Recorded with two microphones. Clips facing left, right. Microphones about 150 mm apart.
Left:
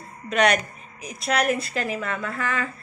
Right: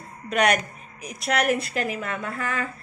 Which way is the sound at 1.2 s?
35° left (ahead or behind).